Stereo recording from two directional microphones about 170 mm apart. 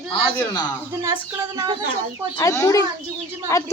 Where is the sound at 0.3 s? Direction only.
25° left (ahead or behind).